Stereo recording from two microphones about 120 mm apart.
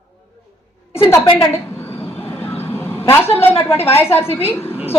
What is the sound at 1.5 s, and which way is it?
Vehicle, 20° left (ahead or behind).